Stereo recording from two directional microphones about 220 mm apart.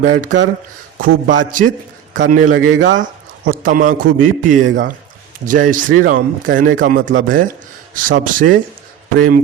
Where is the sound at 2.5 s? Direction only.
65° right (ahead or behind).